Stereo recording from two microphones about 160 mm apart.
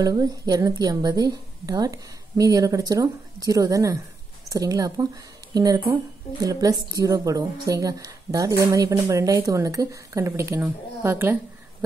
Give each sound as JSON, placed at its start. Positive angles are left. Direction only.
{"t": 0.0, "sound": "a woman's voice", "side_deg": -25}